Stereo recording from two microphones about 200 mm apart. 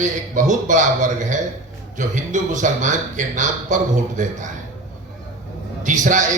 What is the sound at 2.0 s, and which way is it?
A man's voice, 40° right (ahead or behind).